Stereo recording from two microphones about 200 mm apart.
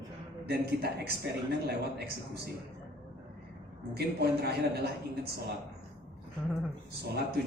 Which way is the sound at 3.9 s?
55° right (ahead or behind).